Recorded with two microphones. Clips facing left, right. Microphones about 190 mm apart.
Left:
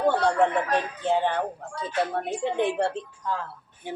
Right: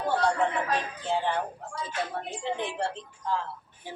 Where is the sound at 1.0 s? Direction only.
60° left (ahead or behind).